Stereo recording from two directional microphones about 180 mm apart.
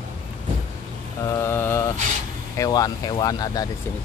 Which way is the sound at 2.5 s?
20° left (ahead or behind).